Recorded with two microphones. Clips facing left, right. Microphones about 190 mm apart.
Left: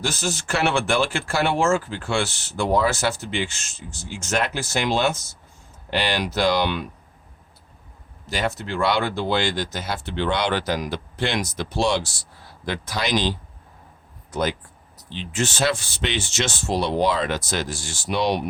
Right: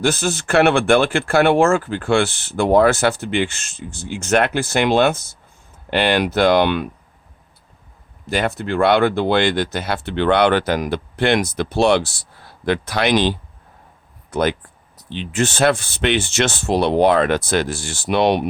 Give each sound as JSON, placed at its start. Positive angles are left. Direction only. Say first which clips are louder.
{"t": 0.0, "sound": "speech", "louder": "right 7 dB", "side_deg": -60}
{"t": 8.3, "sound": "speech", "louder": "right 5 dB", "side_deg": -55}